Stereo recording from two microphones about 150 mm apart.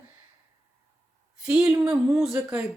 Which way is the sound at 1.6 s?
15° right (ahead or behind).